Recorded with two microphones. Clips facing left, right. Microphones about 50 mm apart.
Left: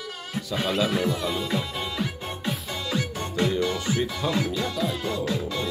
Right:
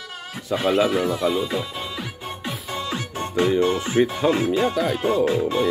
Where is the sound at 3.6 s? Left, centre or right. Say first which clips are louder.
Right 6 dB; right.